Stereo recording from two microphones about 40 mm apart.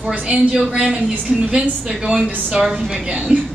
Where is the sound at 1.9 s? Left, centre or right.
Centre.